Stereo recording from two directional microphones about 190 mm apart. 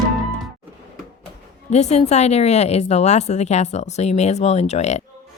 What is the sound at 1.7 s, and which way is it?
A woman's voice, 35° left (ahead or behind).